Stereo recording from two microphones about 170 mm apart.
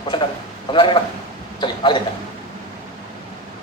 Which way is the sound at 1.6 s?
30° left (ahead or behind).